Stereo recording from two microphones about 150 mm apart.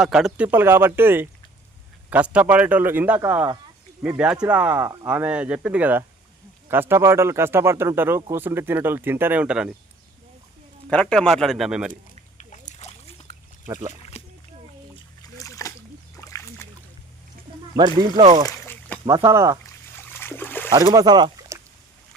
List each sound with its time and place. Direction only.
0.0 s speech: 5° right (ahead or behind)
10.8 s a man's voice: 5° left (ahead or behind)
12.4 s a sound: 55° left (ahead or behind)
14.1 s splash: 45° left (ahead or behind)
15.2 s splash: 20° left (ahead or behind)
17.7 s speech: 30° right (ahead or behind)
18.4 s boat: 15° left (ahead or behind)
19.0 s speech: 20° right (ahead or behind)
20.1 s splash: 15° left (ahead or behind)
20.9 s speech: 25° right (ahead or behind)